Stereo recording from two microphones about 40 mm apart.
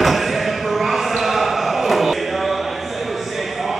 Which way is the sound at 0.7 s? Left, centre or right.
Centre.